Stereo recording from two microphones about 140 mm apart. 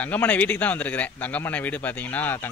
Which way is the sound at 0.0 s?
10° left (ahead or behind).